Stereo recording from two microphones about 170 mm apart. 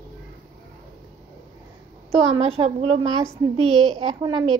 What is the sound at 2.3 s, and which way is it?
Speech, 35° right (ahead or behind).